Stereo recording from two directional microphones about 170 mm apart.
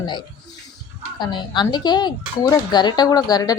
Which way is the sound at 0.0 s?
25° left (ahead or behind).